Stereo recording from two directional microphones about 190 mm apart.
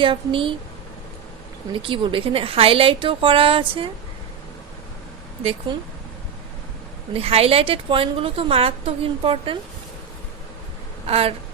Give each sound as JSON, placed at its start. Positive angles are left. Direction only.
{"t": 0.0, "sound": "a woman's voice", "side_deg": -25}
{"t": 1.7, "sound": "a woman's voice", "side_deg": -25}
{"t": 5.7, "sound": "a woman's voice", "side_deg": -25}
{"t": 7.1, "sound": "a woman's voice", "side_deg": -30}
{"t": 11.0, "sound": "speech", "side_deg": -30}